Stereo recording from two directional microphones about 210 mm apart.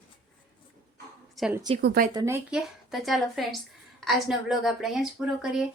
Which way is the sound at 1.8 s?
45° right (ahead or behind).